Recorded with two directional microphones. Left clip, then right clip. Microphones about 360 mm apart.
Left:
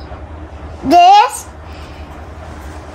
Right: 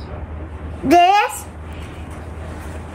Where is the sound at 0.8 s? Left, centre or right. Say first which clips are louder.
Left 6 dB; centre.